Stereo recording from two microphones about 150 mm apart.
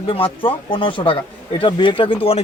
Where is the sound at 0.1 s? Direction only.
35° left (ahead or behind).